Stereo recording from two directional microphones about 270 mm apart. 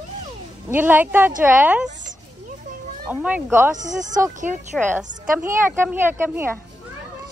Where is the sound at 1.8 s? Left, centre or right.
Right.